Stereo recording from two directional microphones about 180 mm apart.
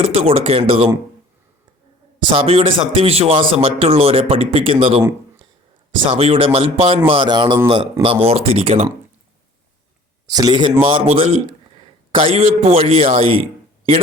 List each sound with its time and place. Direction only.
0.0 s a man's voice: 30° right (ahead or behind)
2.2 s a man's voice: 30° right (ahead or behind)
6.1 s a man's voice: 30° right (ahead or behind)
10.2 s a man's voice: 20° right (ahead or behind)